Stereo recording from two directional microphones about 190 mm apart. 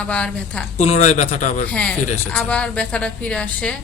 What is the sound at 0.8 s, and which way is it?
Speech, 35° left (ahead or behind).